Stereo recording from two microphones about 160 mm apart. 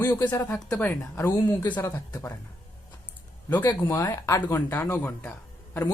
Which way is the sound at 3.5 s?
25° left (ahead or behind).